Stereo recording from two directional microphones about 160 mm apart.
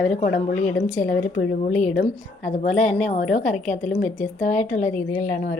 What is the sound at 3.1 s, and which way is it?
Speech, 50° left (ahead or behind).